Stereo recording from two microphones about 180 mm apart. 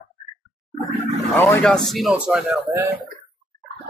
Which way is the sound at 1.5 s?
5° left (ahead or behind).